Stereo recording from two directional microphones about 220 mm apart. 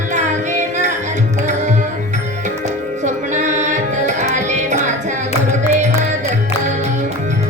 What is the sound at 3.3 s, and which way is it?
Music, 35° right (ahead or behind).